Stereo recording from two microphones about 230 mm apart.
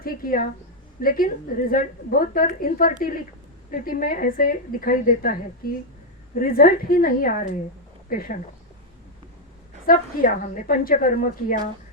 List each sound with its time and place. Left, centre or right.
0.0 s a woman's voice: left
9.8 s a woman's voice: left